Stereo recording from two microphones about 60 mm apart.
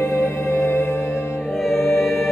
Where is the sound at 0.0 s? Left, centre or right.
Left.